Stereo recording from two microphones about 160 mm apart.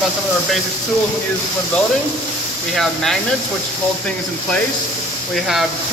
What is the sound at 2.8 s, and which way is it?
Speech, centre (ahead or behind).